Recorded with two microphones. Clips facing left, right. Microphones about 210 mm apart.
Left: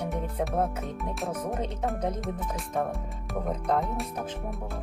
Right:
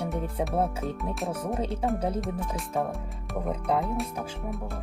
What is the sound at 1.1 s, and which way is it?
Speech, centre (ahead or behind).